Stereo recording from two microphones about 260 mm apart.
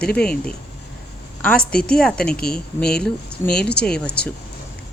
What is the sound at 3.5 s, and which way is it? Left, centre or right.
Speech, left.